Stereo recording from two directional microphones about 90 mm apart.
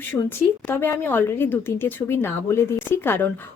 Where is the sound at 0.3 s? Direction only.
25° left (ahead or behind).